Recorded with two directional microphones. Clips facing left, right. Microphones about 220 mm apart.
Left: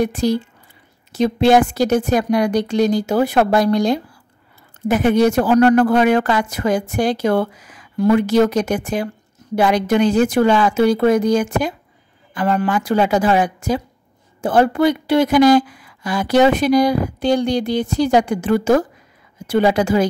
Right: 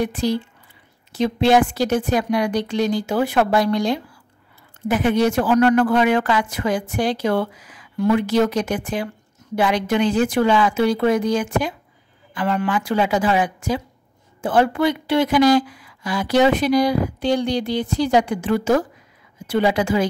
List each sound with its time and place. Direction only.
0.0 s a woman's voice: 45° left (ahead or behind)